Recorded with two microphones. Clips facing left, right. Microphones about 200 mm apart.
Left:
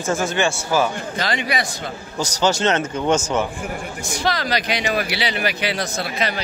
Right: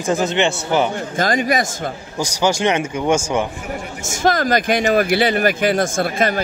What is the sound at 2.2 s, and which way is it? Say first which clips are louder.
Speech: right 1 dB; 10° right (ahead or behind).